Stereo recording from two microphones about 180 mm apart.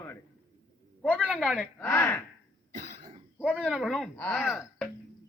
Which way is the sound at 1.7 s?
15° left (ahead or behind).